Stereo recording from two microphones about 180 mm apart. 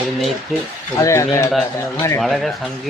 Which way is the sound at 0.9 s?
15° left (ahead or behind).